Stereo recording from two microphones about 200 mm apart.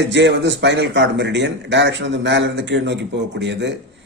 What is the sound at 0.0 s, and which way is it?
Speech, 60° right (ahead or behind).